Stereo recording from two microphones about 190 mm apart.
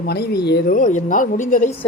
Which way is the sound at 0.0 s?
60° left (ahead or behind).